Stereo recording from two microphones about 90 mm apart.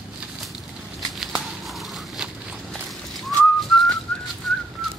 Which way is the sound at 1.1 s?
5° right (ahead or behind).